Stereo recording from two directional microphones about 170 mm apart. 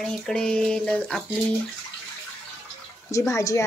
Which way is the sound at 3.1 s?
15° left (ahead or behind).